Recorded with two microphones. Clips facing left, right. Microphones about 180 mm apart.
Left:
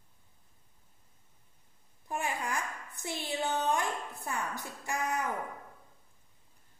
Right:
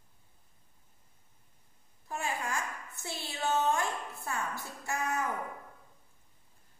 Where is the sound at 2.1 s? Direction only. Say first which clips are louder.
Left 1 dB; 15° left (ahead or behind).